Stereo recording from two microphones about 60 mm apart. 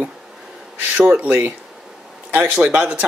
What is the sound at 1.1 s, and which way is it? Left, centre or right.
Speech, right.